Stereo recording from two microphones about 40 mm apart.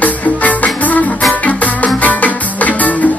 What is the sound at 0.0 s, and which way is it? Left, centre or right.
Music, left.